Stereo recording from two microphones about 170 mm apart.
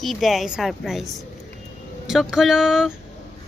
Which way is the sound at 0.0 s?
Centre (ahead or behind).